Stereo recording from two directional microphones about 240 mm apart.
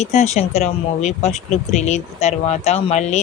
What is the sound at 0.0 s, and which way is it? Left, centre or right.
Speech, left.